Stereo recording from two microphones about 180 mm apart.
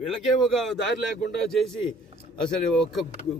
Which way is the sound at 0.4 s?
Centre (ahead or behind).